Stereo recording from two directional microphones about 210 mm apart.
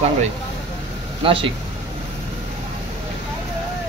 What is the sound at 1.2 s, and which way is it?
Speech, 25° right (ahead or behind).